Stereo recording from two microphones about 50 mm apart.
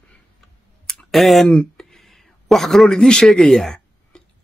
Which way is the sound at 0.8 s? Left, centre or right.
Centre.